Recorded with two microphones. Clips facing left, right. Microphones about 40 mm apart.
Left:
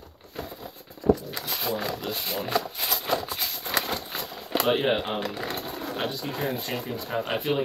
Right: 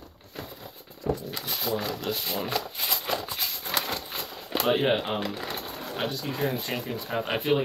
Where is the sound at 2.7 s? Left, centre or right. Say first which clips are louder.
Left 2 dB; centre.